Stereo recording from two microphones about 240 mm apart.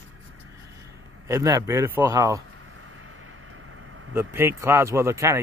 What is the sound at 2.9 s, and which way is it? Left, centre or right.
Vehicle, right.